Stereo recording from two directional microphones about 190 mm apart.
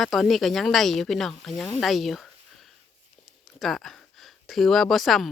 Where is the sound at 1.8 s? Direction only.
Centre (ahead or behind).